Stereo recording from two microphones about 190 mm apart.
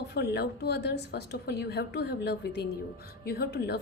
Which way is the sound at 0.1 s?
60° left (ahead or behind).